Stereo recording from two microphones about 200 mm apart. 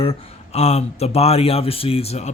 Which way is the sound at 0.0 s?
30° left (ahead or behind).